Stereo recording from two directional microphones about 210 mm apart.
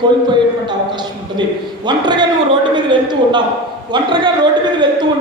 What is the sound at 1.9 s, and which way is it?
A man's voice, 20° right (ahead or behind).